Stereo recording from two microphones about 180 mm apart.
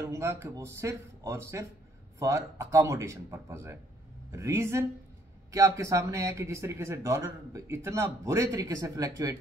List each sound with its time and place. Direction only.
0.0 s speech: 15° right (ahead or behind)